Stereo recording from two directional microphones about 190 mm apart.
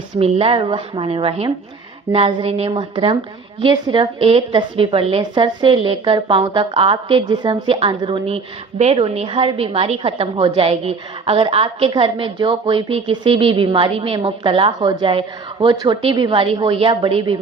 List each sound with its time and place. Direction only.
0.2 s a woman's voice: 30° right (ahead or behind)